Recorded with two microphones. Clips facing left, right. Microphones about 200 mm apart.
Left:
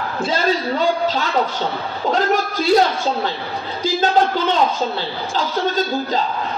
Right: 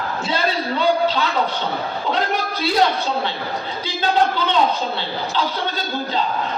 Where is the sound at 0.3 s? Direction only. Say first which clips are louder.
Left 3 dB; 45° left (ahead or behind).